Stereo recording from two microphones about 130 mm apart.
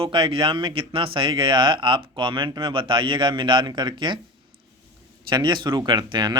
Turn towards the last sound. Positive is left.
turn(degrees=-35)  # may be behind; listen again after turning